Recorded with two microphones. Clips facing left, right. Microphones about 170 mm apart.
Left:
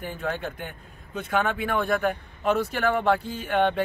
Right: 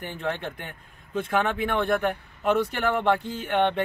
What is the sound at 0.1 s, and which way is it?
Speech, centre (ahead or behind).